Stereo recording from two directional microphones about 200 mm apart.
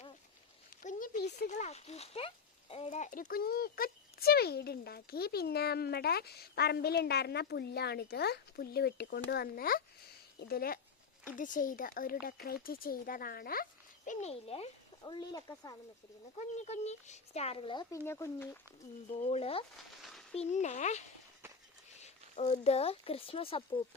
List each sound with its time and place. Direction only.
0.8 s a sound: 40° left (ahead or behind)
1.5 s a child's voice: 35° left (ahead or behind); by 15.7 s 15° left (ahead or behind)
16.6 s speech: 35° left (ahead or behind); by 18.6 s 10° left (ahead or behind)
19.2 s a child's voice: 30° left (ahead or behind)
19.7 s a sound: centre (ahead or behind)
20.3 s a child's voice: 35° left (ahead or behind)
22.0 s speech: 35° left (ahead or behind)